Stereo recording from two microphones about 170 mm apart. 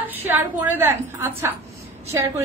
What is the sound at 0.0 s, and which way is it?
A woman's voice, 10° right (ahead or behind).